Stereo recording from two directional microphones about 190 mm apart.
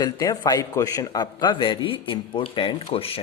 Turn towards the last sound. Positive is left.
turn(degrees=30)  # may be behind; listen again after turning